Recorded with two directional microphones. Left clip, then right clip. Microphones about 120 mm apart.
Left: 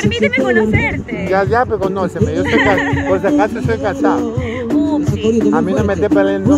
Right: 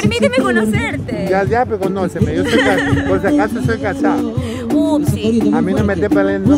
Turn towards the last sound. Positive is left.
turn(degrees=-15)  # may be behind; listen again after turning